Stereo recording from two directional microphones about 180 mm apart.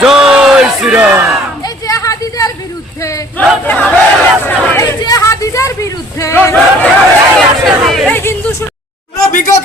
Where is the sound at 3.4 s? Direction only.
5° left (ahead or behind).